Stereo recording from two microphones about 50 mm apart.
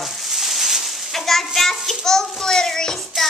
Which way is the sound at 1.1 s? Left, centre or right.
Centre.